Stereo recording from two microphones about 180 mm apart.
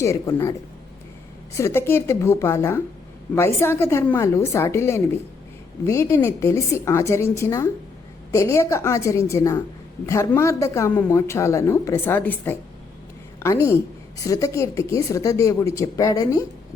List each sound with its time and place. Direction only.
0.0 s speech: 15° left (ahead or behind)
1.5 s speech: 15° left (ahead or behind)